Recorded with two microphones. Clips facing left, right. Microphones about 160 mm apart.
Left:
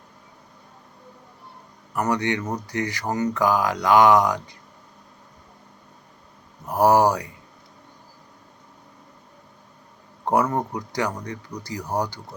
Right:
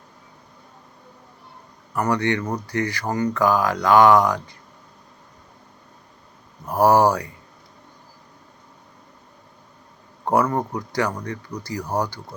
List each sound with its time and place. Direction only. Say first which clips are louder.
2.0 s speech: right 2 dB; 20° left (ahead or behind)
6.7 s speech: right 1 dB; 15° left (ahead or behind)
10.2 s speech: right 1 dB; 20° left (ahead or behind)